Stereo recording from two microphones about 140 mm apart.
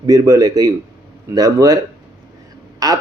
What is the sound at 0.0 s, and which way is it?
Speech, 25° right (ahead or behind).